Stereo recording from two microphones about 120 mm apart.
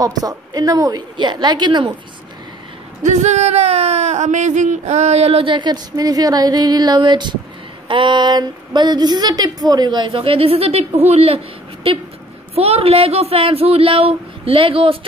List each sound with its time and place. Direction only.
0.0 s a woman's voice: 30° right (ahead or behind)
3.0 s speech: 75° right (ahead or behind); by 15.0 s 50° right (ahead or behind)